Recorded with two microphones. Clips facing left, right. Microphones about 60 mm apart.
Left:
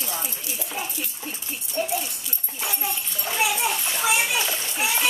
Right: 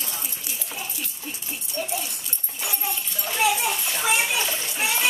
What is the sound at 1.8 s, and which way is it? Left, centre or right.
Dog, left.